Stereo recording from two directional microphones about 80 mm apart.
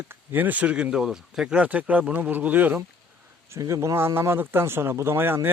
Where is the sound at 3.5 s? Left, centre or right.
Right.